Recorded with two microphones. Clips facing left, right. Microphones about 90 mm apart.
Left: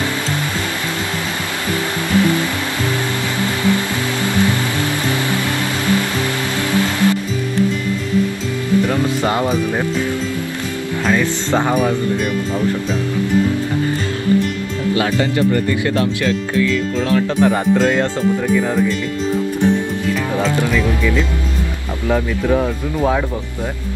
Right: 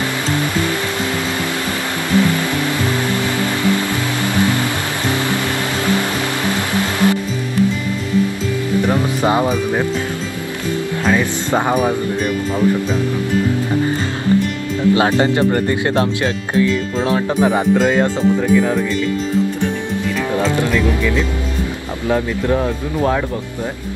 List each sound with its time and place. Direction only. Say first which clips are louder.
8.8 s speech: right 1 dB; 15° right (ahead or behind)
11.1 s speech: even; 10° right (ahead or behind)
15.0 s speech: even; 30° right (ahead or behind)
17.4 s speech: right 1 dB; 10° right (ahead or behind)
18.5 s speech: right 1 dB; centre (ahead or behind)
22.1 s speech: even; centre (ahead or behind)